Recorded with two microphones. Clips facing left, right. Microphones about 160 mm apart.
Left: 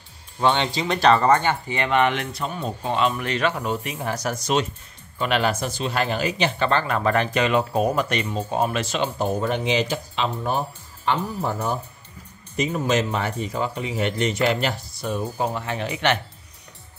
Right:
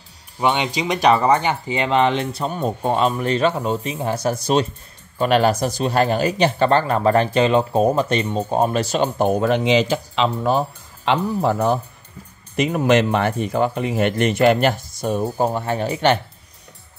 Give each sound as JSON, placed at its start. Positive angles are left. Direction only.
{"t": 0.4, "sound": "speech", "side_deg": -10}
{"t": 9.2, "sound": "speech", "side_deg": -90}
{"t": 11.1, "sound": "speech", "side_deg": -80}